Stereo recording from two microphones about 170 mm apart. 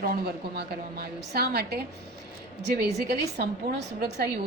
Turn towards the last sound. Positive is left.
turn(degrees=-70)  # may be behind; listen again after turning